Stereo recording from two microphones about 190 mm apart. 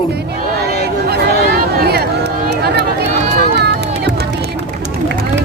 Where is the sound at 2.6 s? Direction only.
60° right (ahead or behind).